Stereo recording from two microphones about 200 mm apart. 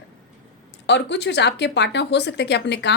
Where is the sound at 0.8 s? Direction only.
60° left (ahead or behind).